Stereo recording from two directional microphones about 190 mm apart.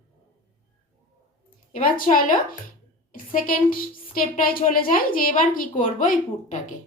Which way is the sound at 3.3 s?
50° left (ahead or behind).